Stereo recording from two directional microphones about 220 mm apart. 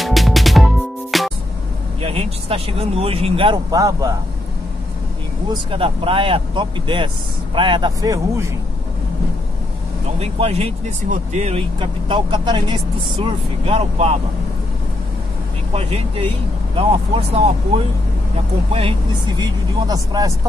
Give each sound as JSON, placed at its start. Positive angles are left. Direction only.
{"t": 0.0, "sound": "music", "side_deg": 0}
{"t": 2.0, "sound": "speech", "side_deg": -25}
{"t": 5.5, "sound": "speech", "side_deg": -25}
{"t": 10.1, "sound": "speech", "side_deg": -25}
{"t": 15.7, "sound": "speech", "side_deg": -25}
{"t": 18.7, "sound": "speech", "side_deg": -25}